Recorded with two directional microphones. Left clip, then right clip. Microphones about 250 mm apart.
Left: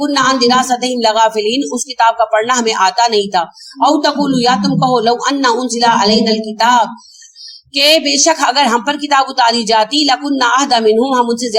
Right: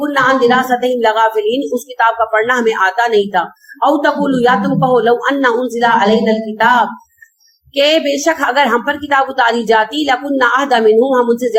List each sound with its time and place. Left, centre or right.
0.3 s a woman's voice: left